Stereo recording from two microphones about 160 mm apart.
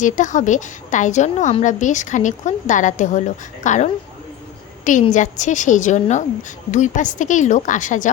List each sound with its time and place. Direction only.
0.0 s speech: 50° left (ahead or behind)
5.1 s speech: 50° left (ahead or behind)